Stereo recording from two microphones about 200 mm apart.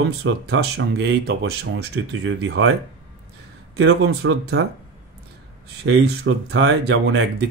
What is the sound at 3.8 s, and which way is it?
Speech, 60° right (ahead or behind).